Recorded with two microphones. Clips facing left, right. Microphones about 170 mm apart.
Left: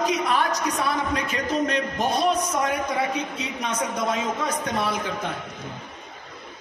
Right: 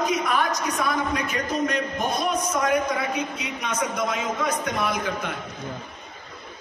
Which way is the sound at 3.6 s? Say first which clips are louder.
Even; 35° left (ahead or behind).